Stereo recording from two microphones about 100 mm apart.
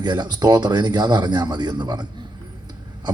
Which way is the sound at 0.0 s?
45° right (ahead or behind).